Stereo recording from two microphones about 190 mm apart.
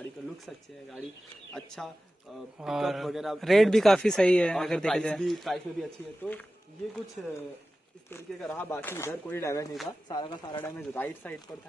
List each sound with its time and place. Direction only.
0.5 s a man's voice: centre (ahead or behind)
2.6 s a man's voice: centre (ahead or behind)
8.4 s speech: 5° left (ahead or behind); by 10.6 s 25° left (ahead or behind)
10.6 s speech: 10° left (ahead or behind)